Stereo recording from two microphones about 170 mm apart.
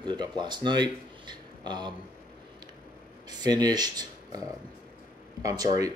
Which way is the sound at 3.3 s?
25° right (ahead or behind).